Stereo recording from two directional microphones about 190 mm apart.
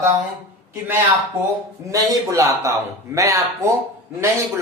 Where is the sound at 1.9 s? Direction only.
15° right (ahead or behind).